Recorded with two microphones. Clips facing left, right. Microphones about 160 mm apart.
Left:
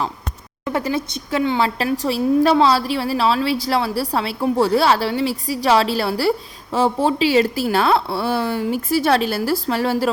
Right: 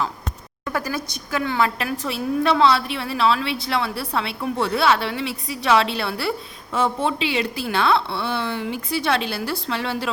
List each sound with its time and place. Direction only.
0.6 s a woman's voice: 25° left (ahead or behind)